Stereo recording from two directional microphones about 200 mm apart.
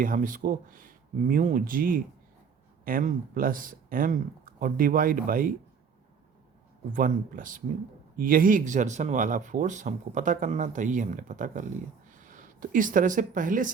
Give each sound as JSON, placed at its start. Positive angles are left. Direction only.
{"t": 0.0, "sound": "speech", "side_deg": -40}
{"t": 6.9, "sound": "speech", "side_deg": -40}